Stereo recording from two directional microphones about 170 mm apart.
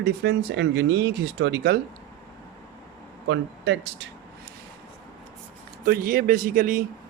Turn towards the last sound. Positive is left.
turn(degrees=-55)  # may be behind; listen again after turning